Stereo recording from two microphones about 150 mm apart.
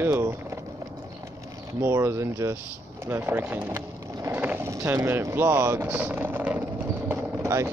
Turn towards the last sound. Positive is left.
turn(degrees=-20)  # may be behind; listen again after turning